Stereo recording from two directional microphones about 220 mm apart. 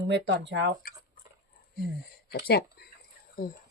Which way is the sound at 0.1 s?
55° right (ahead or behind).